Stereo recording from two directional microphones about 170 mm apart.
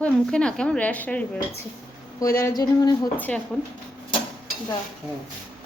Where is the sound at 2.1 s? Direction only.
20° left (ahead or behind).